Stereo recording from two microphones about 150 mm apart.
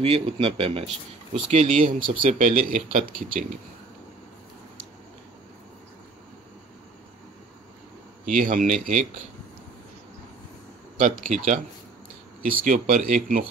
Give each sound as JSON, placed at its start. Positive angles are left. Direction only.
{"t": 0.0, "sound": "speech", "side_deg": -40}
{"t": 1.3, "sound": "speech", "side_deg": -50}
{"t": 2.2, "sound": "speech", "side_deg": -60}
{"t": 3.0, "sound": "speech", "side_deg": -70}
{"t": 8.4, "sound": "speech", "side_deg": -60}
{"t": 11.0, "sound": "speech", "side_deg": -55}
{"t": 12.4, "sound": "speech", "side_deg": -65}